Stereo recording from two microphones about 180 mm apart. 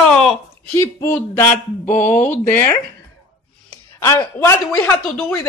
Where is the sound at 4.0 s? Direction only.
15° left (ahead or behind).